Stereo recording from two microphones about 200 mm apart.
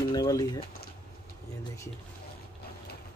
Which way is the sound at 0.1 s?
20° left (ahead or behind).